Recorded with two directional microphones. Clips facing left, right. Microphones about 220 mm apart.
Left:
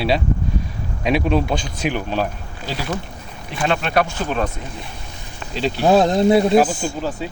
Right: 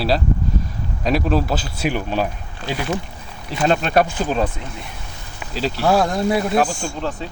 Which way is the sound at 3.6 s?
40° right (ahead or behind).